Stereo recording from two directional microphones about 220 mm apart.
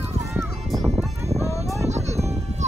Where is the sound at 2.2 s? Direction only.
30° right (ahead or behind).